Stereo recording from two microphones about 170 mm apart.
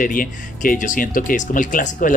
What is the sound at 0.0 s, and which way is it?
Speech, 55° left (ahead or behind).